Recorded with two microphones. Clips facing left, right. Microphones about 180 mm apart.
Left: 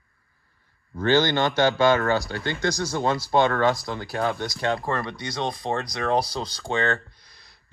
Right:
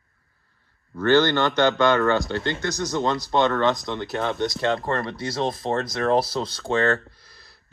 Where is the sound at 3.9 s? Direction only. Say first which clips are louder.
Even; 5° left (ahead or behind).